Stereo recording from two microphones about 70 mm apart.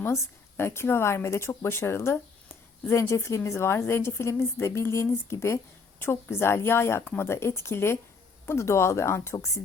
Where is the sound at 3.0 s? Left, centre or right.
Left.